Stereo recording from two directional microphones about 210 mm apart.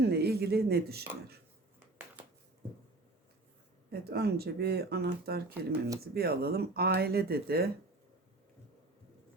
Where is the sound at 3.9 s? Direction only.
50° right (ahead or behind).